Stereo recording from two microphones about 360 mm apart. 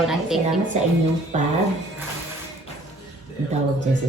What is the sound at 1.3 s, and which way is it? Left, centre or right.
Speech, centre.